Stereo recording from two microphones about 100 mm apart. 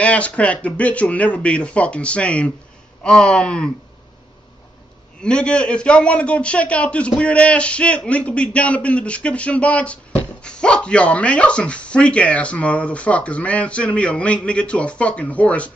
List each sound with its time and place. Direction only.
0.0 s speech: 15° left (ahead or behind)
5.2 s speech: 10° left (ahead or behind)